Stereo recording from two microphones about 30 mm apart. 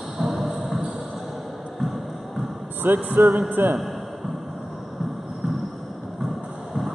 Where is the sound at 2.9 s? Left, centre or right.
Right.